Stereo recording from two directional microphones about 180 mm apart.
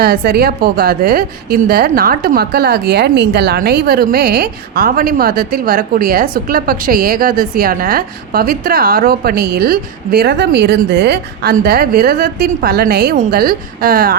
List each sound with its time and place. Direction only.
0.0 s a woman's voice: 60° right (ahead or behind)